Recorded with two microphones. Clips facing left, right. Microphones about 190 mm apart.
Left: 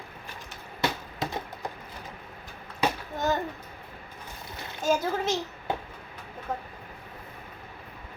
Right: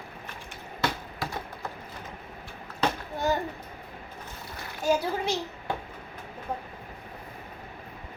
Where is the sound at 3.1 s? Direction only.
10° right (ahead or behind).